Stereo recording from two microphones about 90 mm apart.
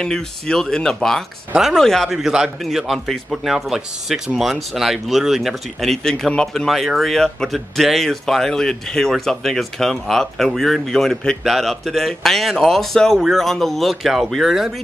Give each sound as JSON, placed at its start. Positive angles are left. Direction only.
{"t": 0.0, "sound": "a man's voice", "side_deg": 5}